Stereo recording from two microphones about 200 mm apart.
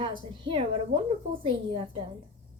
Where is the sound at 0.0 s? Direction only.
25° right (ahead or behind).